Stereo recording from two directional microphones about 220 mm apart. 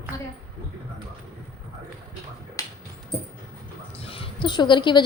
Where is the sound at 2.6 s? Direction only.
15° left (ahead or behind).